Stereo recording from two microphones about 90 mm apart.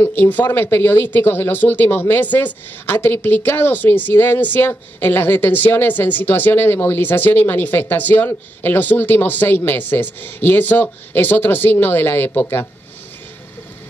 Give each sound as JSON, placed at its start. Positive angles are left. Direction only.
{"t": 0.0, "sound": "speech", "side_deg": 20}